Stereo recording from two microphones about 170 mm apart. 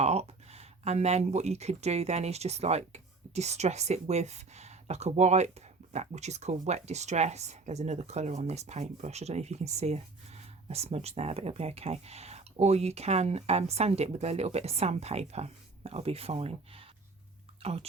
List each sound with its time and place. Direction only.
0.0 s speech: 40° right (ahead or behind)